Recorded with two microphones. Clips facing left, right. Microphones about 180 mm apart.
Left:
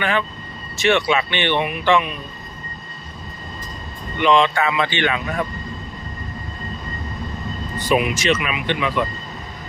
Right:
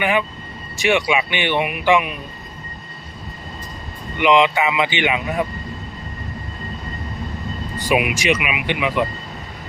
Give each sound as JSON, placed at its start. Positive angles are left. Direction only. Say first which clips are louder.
{"t": 0.0, "sound": "speech", "louder": "right 2 dB", "side_deg": -15}
{"t": 4.2, "sound": "speech", "louder": "right 1 dB", "side_deg": -15}
{"t": 7.8, "sound": "speech", "louder": "even", "side_deg": -10}